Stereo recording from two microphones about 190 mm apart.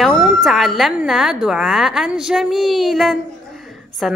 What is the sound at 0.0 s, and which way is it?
A woman's voice, centre (ahead or behind).